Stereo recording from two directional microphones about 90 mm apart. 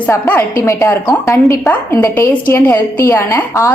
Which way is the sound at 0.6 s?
35° left (ahead or behind).